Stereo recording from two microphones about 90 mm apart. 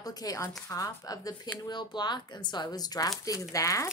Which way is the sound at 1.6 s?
55° left (ahead or behind).